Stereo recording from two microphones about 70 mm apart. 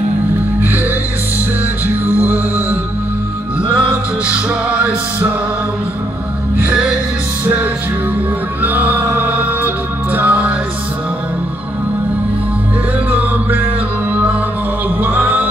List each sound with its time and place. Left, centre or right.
2.0 s music: right
3.9 s music: centre
8.6 s music: right
15.0 s music: right